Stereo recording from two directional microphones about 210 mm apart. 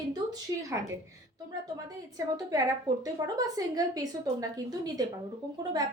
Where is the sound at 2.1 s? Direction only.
15° right (ahead or behind).